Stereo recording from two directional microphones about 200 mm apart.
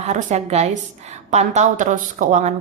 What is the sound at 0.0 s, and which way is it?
Speech, 35° right (ahead or behind).